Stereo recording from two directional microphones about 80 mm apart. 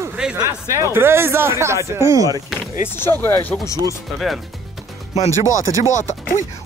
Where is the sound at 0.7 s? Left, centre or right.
Right.